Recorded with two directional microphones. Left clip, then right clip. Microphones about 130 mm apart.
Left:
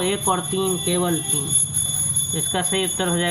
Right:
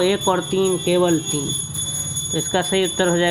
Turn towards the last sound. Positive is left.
turn(degrees=-55)  # may be behind; listen again after turning